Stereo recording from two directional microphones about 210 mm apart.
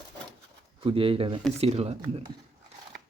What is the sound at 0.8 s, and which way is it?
Speech, 25° right (ahead or behind).